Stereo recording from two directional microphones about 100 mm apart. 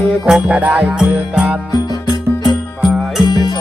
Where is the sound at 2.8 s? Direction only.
Centre (ahead or behind).